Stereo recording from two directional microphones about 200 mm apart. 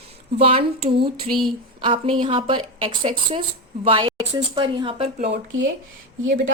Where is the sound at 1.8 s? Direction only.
25° right (ahead or behind).